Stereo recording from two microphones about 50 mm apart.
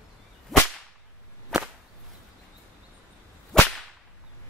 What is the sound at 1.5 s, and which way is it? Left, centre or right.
Whip, centre.